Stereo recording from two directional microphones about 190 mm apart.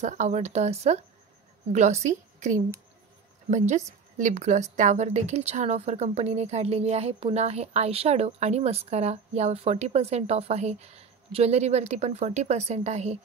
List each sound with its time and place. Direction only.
0.0 s a woman's voice: 40° right (ahead or behind)